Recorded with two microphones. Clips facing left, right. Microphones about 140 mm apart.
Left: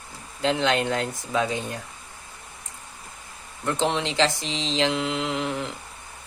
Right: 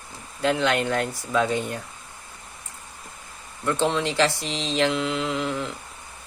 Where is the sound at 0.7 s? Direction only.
60° right (ahead or behind).